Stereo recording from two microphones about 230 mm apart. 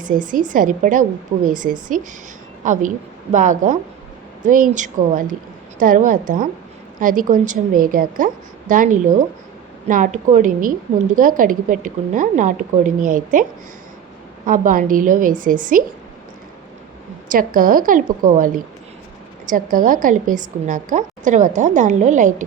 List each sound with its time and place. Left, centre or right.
0.3 s a woman's voice: right
14.4 s a woman's voice: right
17.2 s a woman's voice: right